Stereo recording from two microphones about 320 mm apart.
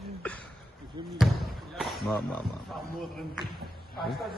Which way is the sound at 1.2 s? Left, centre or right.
Centre.